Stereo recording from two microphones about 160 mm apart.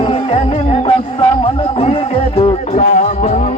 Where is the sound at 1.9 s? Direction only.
40° left (ahead or behind).